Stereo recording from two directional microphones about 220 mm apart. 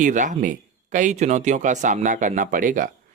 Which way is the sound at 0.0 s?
35° right (ahead or behind).